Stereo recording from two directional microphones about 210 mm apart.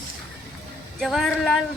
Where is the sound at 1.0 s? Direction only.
Centre (ahead or behind).